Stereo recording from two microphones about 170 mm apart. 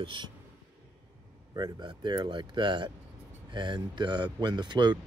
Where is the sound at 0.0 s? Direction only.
30° right (ahead or behind).